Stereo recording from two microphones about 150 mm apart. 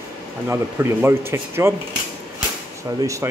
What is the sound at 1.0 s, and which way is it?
Speech, 15° right (ahead or behind).